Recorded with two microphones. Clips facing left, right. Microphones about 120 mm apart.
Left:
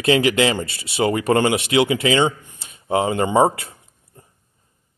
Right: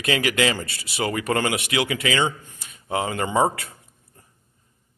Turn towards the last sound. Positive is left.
turn(degrees=25)  # may be behind; listen again after turning